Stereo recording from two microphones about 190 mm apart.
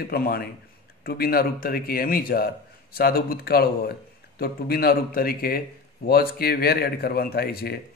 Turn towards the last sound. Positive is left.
turn(degrees=55)  # may be behind; listen again after turning